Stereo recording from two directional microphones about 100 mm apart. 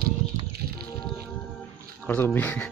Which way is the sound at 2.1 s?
15° left (ahead or behind).